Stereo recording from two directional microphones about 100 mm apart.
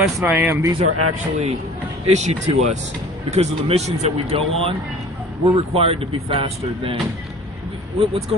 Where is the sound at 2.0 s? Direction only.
90° right; by 6.9 s 65° right (ahead or behind).